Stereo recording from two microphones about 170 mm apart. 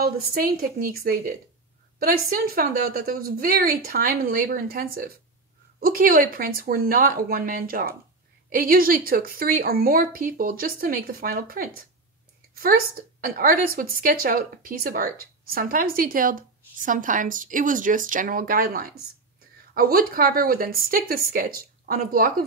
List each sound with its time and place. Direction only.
0.0 s a woman's voice: 60° right (ahead or behind)